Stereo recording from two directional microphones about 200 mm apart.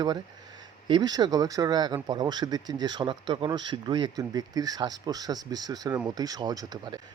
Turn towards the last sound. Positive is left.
turn(degrees=-20)  # may be behind; listen again after turning